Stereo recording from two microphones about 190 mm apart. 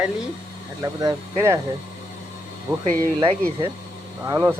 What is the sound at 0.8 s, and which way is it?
Speech, 20° right (ahead or behind).